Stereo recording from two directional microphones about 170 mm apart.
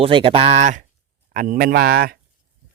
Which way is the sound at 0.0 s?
35° right (ahead or behind).